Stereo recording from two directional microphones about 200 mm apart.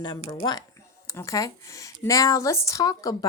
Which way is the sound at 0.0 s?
20° left (ahead or behind).